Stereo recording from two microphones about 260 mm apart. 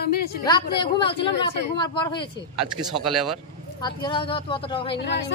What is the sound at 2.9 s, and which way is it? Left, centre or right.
Speech, centre.